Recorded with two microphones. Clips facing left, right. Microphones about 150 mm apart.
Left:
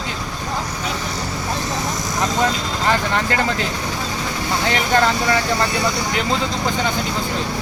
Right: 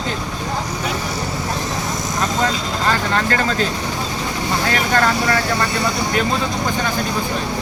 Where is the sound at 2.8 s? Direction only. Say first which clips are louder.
Even; 15° left (ahead or behind).